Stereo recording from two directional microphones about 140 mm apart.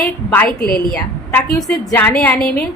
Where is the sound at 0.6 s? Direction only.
90° left.